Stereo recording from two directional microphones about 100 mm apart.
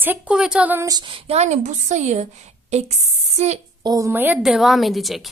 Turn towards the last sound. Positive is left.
turn(degrees=0)  # may be behind; listen again after turning